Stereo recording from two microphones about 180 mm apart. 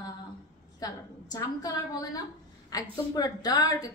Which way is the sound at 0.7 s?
20° left (ahead or behind).